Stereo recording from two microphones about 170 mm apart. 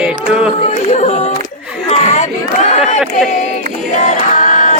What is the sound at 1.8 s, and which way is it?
Chatter, 40° left (ahead or behind).